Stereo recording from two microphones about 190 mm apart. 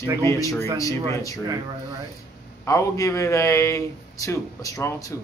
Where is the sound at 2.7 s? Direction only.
15° left (ahead or behind).